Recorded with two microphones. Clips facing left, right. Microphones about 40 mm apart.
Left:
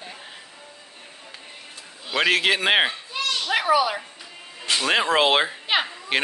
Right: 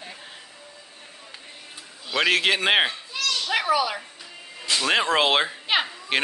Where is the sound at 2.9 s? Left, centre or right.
Left.